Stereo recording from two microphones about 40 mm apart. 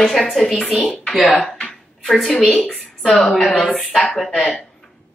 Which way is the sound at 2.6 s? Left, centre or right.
Left.